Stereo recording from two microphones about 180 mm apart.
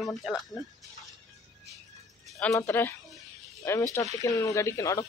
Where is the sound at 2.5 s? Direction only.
15° left (ahead or behind).